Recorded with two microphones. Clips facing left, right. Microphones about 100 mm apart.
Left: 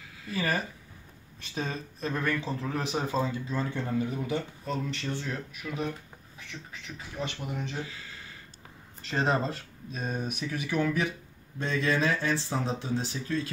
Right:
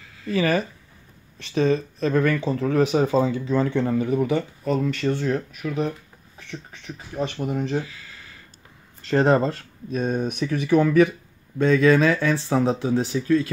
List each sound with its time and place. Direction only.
0.3 s speech: 85° right; by 6.8 s 35° right (ahead or behind)
7.4 s speech: 45° right (ahead or behind)
7.8 s a sound: 25° left (ahead or behind)
9.1 s speech: 55° right (ahead or behind)